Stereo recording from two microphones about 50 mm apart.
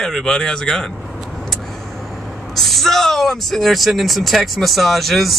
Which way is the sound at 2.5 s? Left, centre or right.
Centre.